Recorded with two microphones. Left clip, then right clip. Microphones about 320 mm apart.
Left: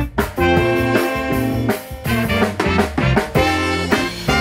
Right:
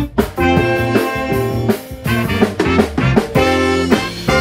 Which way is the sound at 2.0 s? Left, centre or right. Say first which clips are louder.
Right 2 dB; centre.